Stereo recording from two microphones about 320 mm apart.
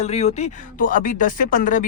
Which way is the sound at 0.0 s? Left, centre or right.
Centre.